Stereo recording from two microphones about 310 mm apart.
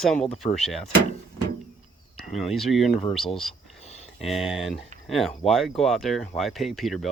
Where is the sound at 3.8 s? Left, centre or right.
Left.